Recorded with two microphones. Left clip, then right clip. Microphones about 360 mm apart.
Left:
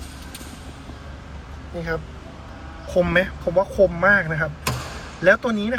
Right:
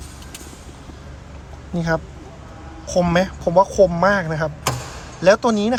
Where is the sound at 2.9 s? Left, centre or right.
Centre.